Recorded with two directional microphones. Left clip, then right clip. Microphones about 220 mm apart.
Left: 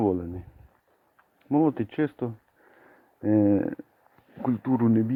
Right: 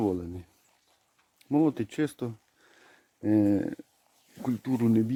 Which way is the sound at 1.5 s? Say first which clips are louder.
Left 2 dB; 20° right (ahead or behind).